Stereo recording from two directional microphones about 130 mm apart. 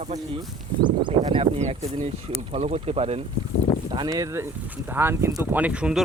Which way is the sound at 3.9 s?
30° right (ahead or behind).